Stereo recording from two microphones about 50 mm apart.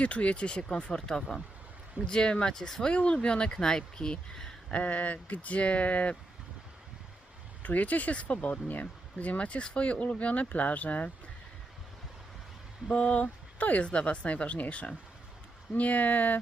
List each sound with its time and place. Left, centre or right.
0.0 s speech: left; by 2.8 s centre
2.8 s speech: left
4.7 s speech: left
7.6 s speech: left
12.9 s speech: left